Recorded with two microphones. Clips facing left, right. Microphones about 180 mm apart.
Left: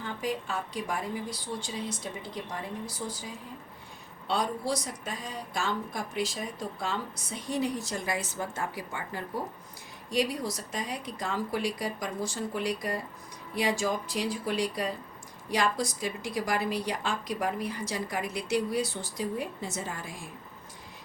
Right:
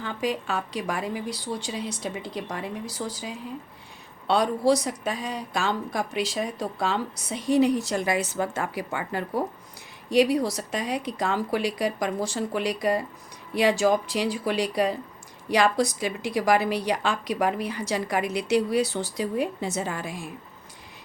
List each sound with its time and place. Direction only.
0.0 s a woman's voice: 80° right